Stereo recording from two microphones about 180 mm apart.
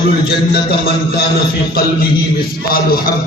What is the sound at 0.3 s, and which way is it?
Speech, 60° left (ahead or behind).